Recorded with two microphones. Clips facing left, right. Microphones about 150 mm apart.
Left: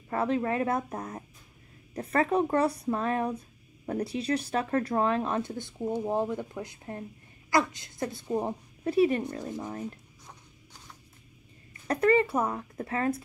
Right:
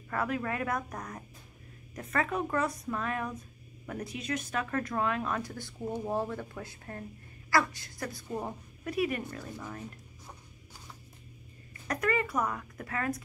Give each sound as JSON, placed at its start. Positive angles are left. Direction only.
{"t": 0.1, "sound": "speech", "side_deg": 25}
{"t": 11.9, "sound": "speech", "side_deg": 30}